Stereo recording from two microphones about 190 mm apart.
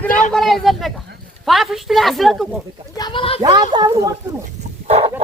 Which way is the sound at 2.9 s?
25° left (ahead or behind).